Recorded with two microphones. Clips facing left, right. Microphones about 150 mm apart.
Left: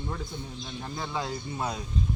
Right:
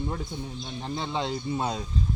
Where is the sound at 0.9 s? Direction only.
25° right (ahead or behind).